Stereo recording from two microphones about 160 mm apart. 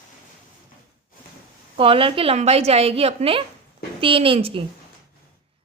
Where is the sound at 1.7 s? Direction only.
35° right (ahead or behind).